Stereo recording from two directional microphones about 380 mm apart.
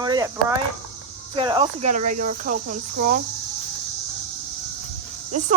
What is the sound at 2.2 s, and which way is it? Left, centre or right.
Cricket, centre.